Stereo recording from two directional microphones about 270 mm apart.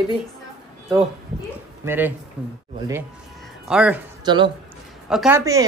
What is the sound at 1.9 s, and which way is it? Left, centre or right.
Speech, centre.